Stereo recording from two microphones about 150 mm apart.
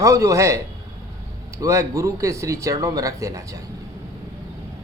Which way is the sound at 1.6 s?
20° right (ahead or behind).